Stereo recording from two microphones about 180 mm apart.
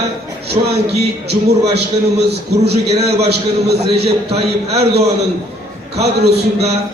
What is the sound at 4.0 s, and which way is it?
Speech, 35° right (ahead or behind).